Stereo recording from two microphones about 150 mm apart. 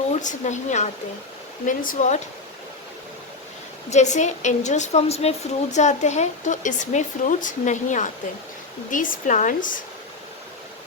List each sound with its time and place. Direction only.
0.2 s a woman's voice: 55° left (ahead or behind)
3.8 s a woman's voice: 50° left (ahead or behind)